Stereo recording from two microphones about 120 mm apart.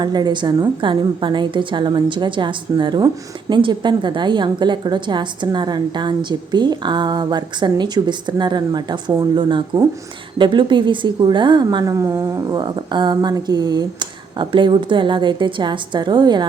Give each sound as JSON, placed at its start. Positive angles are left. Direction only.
{"t": 0.0, "sound": "a woman's voice", "side_deg": -35}